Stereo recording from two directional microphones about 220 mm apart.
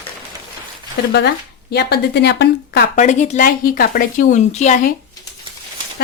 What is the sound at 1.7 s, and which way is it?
A woman's voice, 50° left (ahead or behind).